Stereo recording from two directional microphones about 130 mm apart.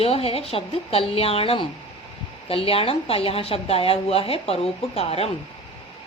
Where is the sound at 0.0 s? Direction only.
50° left (ahead or behind).